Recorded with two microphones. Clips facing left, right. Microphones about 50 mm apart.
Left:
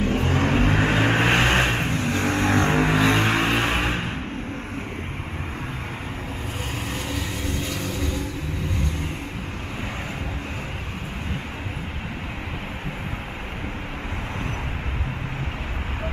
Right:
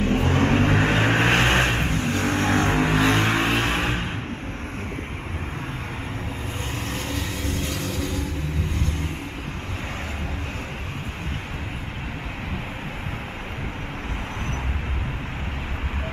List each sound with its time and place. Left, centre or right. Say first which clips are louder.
0.0 s vehicle: right 1 dB; centre
2.0 s vehicle: left 1 dB; left
2.6 s vehicle: left 1 dB; centre
6.9 s vehicle: even; centre